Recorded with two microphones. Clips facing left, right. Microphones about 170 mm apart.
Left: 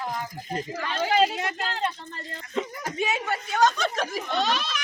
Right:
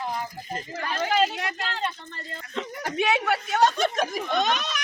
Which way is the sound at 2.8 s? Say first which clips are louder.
Right 8 dB; 80° right.